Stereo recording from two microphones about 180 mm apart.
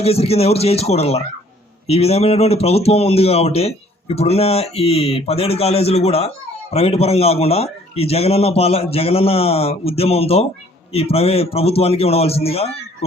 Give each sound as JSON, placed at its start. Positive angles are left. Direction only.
{"t": 0.0, "sound": "speech", "side_deg": 35}